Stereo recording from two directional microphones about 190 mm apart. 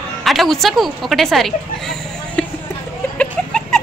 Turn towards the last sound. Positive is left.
turn(degrees=5)  # may be behind; listen again after turning